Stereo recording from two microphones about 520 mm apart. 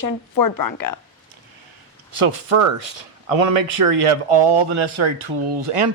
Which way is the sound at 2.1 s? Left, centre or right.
Right.